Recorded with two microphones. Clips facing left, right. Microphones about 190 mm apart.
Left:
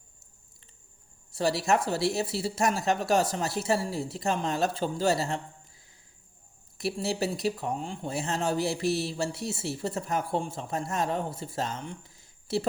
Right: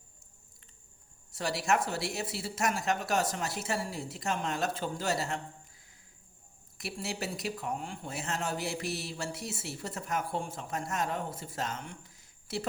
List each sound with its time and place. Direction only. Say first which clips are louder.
1.3 s speech: left 5 dB; 30° left (ahead or behind)
6.7 s speech: left 8 dB; 30° left (ahead or behind)